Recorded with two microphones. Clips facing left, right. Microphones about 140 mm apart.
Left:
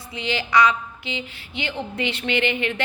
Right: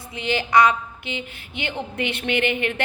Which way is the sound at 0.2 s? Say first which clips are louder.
Right 2 dB; 50° right (ahead or behind).